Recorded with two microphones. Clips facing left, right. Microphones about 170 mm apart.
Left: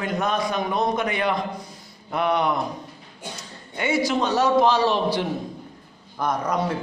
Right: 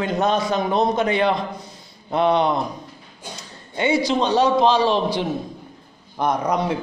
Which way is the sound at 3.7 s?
20° right (ahead or behind).